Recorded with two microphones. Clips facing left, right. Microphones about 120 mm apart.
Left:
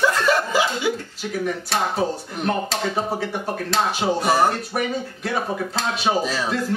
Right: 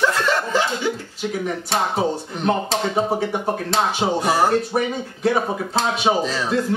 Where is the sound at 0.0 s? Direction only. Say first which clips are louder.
Left 1 dB; 10° left (ahead or behind).